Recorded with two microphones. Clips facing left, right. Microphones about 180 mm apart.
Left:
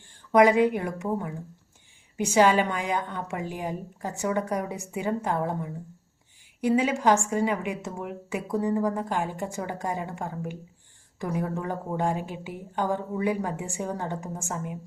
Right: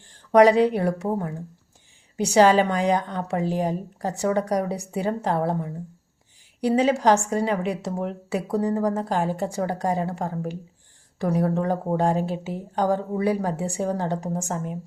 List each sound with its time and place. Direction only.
0.3 s a woman's voice: 35° right (ahead or behind)